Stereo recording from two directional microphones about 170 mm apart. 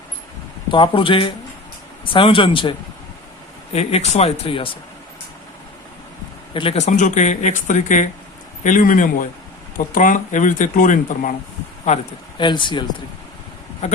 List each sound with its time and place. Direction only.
0.7 s speech: 30° left (ahead or behind)
6.5 s speech: 30° left (ahead or behind)
12.4 s speech: 25° left (ahead or behind)
13.8 s speech: 40° left (ahead or behind)